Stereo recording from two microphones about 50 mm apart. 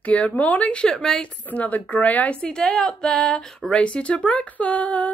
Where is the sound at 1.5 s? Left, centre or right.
Left.